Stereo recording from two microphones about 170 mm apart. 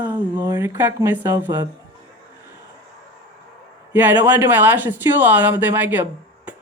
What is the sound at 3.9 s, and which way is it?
Speech, 10° right (ahead or behind).